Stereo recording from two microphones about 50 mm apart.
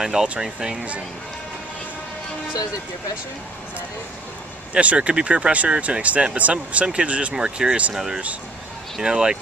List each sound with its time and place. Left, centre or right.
0.0 s speech: centre
4.7 s speech: right
7.9 s speech: centre